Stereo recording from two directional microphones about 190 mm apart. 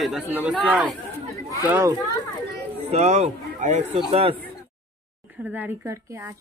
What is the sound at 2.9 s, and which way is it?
A man's voice, 35° right (ahead or behind).